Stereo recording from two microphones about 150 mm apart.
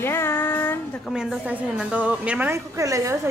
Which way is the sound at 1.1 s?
5° right (ahead or behind).